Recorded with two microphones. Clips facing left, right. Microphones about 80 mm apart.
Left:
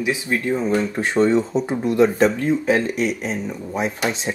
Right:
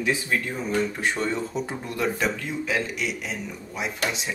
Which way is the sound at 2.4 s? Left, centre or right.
Left.